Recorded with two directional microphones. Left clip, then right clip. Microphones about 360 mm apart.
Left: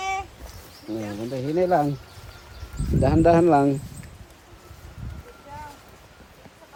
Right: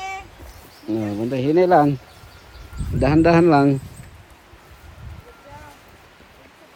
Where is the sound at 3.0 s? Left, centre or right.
Right.